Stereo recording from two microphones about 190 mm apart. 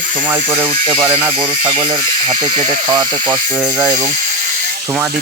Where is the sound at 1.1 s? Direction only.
25° right (ahead or behind).